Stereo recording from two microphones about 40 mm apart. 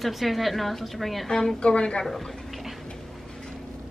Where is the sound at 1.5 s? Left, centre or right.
Left.